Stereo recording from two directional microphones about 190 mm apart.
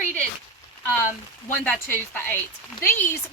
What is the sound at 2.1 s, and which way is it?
Speech, 10° left (ahead or behind).